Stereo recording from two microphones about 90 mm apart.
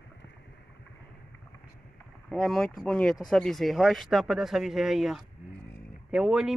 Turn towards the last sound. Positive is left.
turn(degrees=-5)  # may be behind; listen again after turning